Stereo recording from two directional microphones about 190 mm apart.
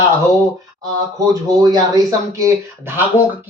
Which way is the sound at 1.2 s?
20° right (ahead or behind).